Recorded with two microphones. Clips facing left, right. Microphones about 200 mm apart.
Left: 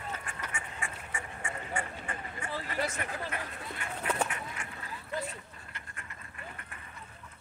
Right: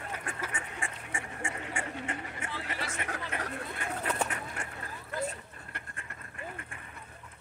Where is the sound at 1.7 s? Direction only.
25° right (ahead or behind).